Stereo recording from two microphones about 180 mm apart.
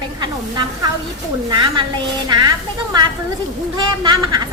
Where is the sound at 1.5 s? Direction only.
25° right (ahead or behind).